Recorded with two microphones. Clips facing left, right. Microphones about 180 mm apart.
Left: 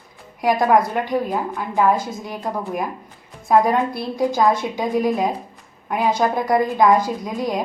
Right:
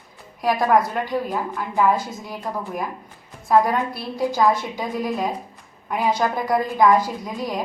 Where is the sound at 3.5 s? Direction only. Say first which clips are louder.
Left 2 dB; 15° left (ahead or behind).